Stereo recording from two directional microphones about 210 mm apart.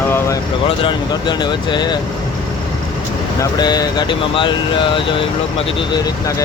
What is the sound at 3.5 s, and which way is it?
Speech, 20° left (ahead or behind).